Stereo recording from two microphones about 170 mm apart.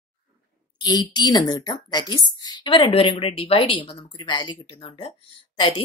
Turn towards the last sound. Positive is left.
turn(degrees=30)  # may be behind; listen again after turning